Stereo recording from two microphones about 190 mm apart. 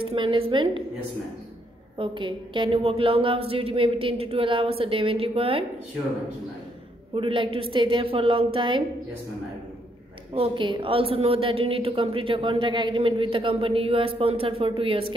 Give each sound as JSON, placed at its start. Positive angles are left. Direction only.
{"t": 0.0, "sound": "a woman's voice", "side_deg": -25}
{"t": 2.0, "sound": "a woman's voice", "side_deg": -25}
{"t": 7.2, "sound": "a woman's voice", "side_deg": -30}
{"t": 10.3, "sound": "a woman's voice", "side_deg": -25}